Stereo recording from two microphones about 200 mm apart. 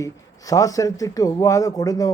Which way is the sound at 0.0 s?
15° left (ahead or behind).